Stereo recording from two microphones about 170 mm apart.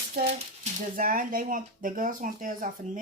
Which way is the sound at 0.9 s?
55° right (ahead or behind).